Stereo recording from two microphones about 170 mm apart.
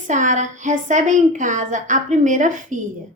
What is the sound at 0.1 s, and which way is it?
A woman's voice, 45° right (ahead or behind).